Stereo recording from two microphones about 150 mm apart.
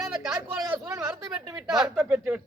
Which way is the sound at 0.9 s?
20° right (ahead or behind).